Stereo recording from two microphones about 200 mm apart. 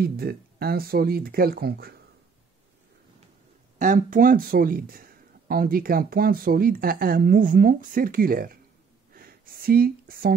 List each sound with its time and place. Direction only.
0.0 s speech: 50° right (ahead or behind)
3.7 s speech: 40° right (ahead or behind)
9.1 s a sound: 50° right (ahead or behind)